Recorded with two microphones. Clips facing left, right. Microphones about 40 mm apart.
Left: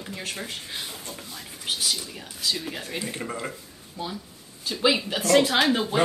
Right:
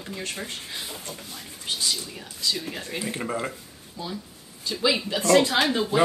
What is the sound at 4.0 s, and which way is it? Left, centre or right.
Speech, left.